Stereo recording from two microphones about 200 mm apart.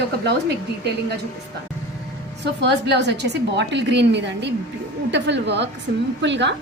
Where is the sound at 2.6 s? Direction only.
55° right (ahead or behind).